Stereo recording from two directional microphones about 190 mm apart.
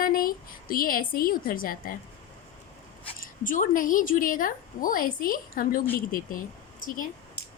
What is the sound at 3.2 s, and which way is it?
A woman's voice, 45° left (ahead or behind).